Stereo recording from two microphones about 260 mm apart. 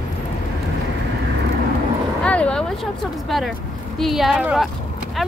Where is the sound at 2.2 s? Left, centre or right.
Centre.